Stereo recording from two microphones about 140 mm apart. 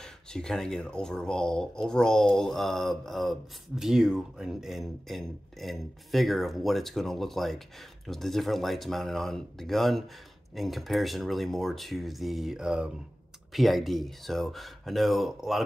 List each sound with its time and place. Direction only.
0.0 s speech: 5° left (ahead or behind)